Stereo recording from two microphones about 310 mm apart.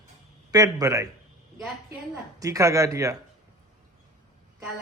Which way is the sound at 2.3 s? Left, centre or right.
Centre.